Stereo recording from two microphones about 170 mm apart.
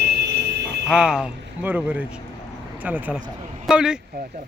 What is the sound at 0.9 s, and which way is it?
Speech, 5° right (ahead or behind).